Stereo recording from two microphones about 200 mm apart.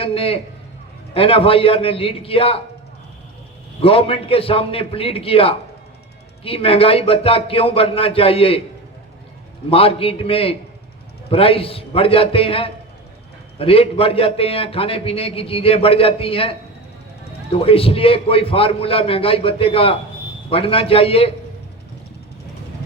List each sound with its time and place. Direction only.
0.0 s a man's voice: 30° left (ahead or behind)
3.8 s a man's voice: 30° left (ahead or behind)
9.6 s a man's voice: 30° left (ahead or behind)